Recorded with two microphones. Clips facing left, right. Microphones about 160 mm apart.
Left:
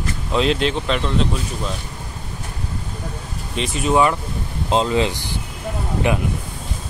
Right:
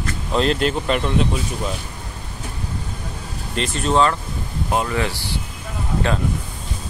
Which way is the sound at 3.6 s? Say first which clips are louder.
Left 1 dB; 5° left (ahead or behind).